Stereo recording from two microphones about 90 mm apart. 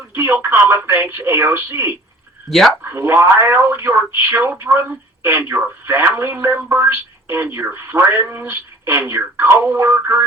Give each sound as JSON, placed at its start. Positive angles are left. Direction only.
{"t": 0.1, "sound": "speech", "side_deg": -25}
{"t": 2.5, "sound": "speech", "side_deg": 0}
{"t": 2.8, "sound": "speech", "side_deg": -25}